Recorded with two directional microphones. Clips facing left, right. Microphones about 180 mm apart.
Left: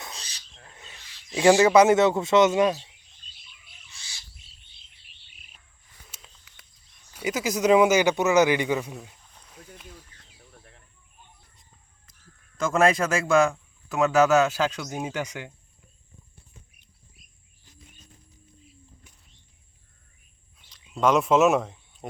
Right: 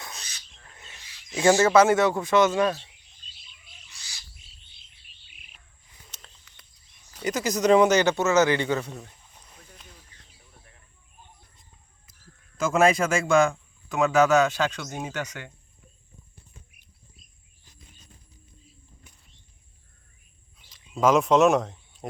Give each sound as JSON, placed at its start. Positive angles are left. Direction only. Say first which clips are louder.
{"t": 0.0, "sound": "owl", "louder": "left 1 dB", "side_deg": 30}
{"t": 0.7, "sound": "owl", "louder": "left 1 dB", "side_deg": 20}
{"t": 1.4, "sound": "speech", "louder": "left 2 dB", "side_deg": 15}
{"t": 3.9, "sound": "bird", "louder": "left 1 dB", "side_deg": 25}
{"t": 6.1, "sound": "a sound", "louder": "right 1 dB", "side_deg": 5}
{"t": 7.1, "sound": "speech", "louder": "even", "side_deg": 10}
{"t": 9.0, "sound": "a sound", "louder": "even", "side_deg": -5}
{"t": 12.5, "sound": "a man's voice", "louder": "right 1 dB", "side_deg": 0}
{"t": 20.7, "sound": "speech", "louder": "right 1 dB", "side_deg": 0}